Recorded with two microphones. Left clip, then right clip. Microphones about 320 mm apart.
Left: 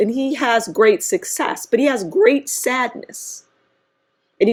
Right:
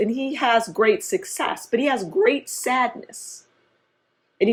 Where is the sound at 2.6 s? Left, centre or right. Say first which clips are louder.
Left 2 dB; left.